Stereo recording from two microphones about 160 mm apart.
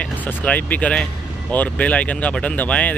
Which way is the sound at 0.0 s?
10° left (ahead or behind).